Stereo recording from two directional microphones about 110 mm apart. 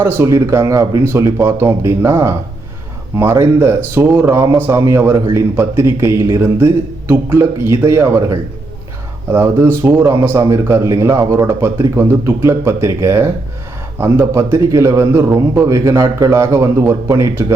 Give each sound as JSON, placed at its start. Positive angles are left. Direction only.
{"t": 0.0, "sound": "speech", "side_deg": -25}